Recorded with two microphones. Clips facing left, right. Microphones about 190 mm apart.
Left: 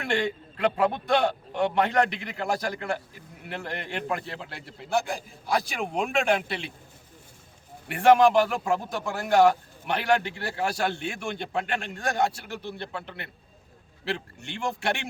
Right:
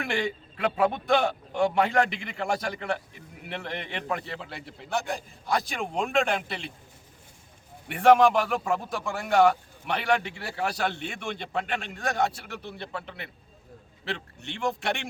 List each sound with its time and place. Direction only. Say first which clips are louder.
0.1 s a man's voice: left 2 dB; 5° right (ahead or behind)
7.9 s a man's voice: even; centre (ahead or behind)